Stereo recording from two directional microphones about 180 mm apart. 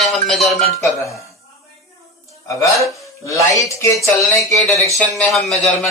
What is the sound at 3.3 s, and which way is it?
Speech, 20° left (ahead or behind).